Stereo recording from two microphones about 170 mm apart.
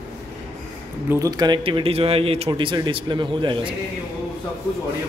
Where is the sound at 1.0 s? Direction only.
20° right (ahead or behind).